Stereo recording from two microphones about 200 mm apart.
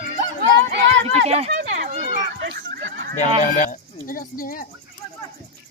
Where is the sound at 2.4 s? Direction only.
60° right (ahead or behind).